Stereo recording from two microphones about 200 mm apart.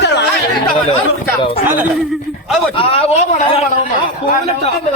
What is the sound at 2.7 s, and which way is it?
Speech, 30° left (ahead or behind).